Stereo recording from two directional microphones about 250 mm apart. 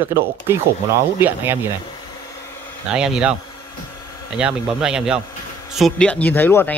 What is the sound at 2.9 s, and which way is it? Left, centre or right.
Speech, centre.